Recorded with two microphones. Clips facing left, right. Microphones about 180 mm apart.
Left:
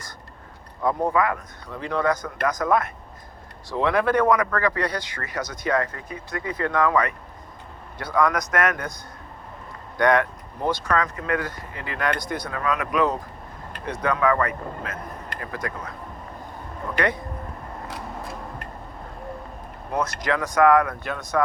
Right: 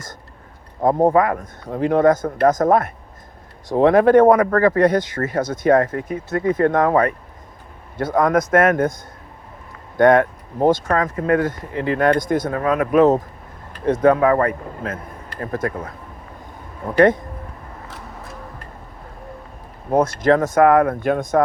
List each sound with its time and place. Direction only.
1.0 s speech: 45° right (ahead or behind)
8.4 s speech: 30° right (ahead or behind)
8.7 s speech: 50° right (ahead or behind)
10.0 s speech: 50° right (ahead or behind)
11.4 s speech: 25° right (ahead or behind)
11.9 s speech: 45° right (ahead or behind)
14.3 s speech: 30° right (ahead or behind)
15.4 s speech: 50° right (ahead or behind)
19.9 s speech: 50° right (ahead or behind)